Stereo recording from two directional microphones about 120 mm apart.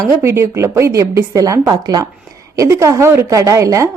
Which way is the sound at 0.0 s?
20° right (ahead or behind).